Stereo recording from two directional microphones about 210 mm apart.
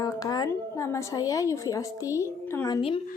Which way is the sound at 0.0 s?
15° left (ahead or behind).